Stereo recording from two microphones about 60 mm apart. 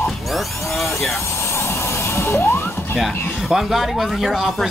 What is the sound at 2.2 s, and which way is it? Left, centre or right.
Music, left.